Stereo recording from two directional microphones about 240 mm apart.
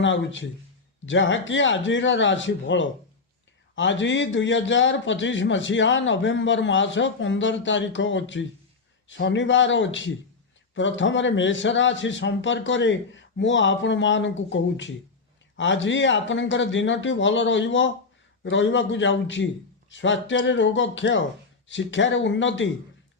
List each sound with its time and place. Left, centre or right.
0.0 s a man's voice: left